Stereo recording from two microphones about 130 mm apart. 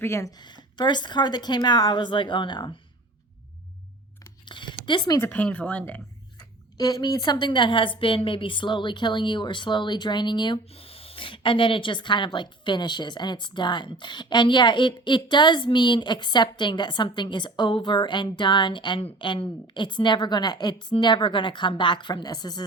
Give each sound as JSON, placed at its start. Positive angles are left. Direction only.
{"t": 0.0, "sound": "speech", "side_deg": 20}
{"t": 4.4, "sound": "a sound", "side_deg": 35}
{"t": 5.1, "sound": "speech", "side_deg": 15}
{"t": 6.7, "sound": "speech", "side_deg": 30}
{"t": 10.7, "sound": "speech", "side_deg": 45}